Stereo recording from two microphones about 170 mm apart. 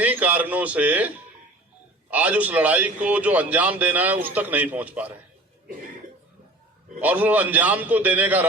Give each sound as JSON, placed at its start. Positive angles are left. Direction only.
{"t": 0.0, "sound": "a man's voice", "side_deg": -10}
{"t": 7.0, "sound": "a man's voice", "side_deg": -10}